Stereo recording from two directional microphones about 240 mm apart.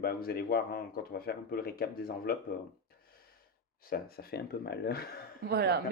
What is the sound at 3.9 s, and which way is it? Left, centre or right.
Speech, left.